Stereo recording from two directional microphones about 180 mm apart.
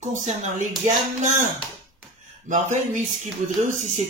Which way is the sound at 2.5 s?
45° right (ahead or behind).